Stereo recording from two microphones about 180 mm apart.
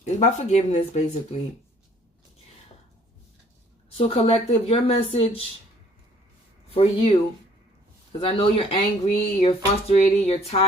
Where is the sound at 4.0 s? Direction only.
30° left (ahead or behind).